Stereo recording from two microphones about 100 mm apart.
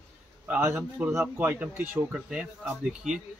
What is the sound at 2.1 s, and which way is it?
Speech, 5° right (ahead or behind).